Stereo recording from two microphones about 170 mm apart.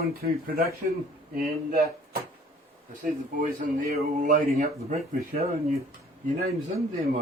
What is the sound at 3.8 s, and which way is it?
Speech, 50° right (ahead or behind).